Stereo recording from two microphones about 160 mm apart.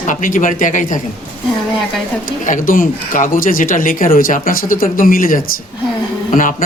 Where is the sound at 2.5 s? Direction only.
60° left (ahead or behind).